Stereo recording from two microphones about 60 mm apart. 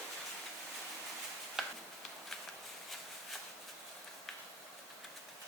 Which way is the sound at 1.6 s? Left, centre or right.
Centre.